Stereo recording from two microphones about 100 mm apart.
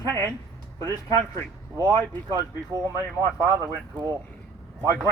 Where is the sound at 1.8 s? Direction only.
30° right (ahead or behind).